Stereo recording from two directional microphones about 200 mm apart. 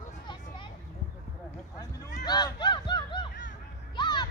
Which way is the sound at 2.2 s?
20° left (ahead or behind).